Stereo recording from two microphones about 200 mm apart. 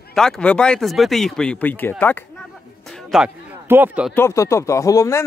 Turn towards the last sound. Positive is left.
turn(degrees=15)  # may be behind; listen again after turning